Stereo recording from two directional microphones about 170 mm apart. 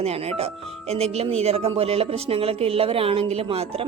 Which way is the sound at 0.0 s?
35° right (ahead or behind).